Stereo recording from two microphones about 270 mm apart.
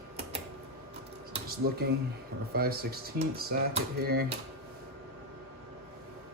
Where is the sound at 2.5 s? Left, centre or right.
Right.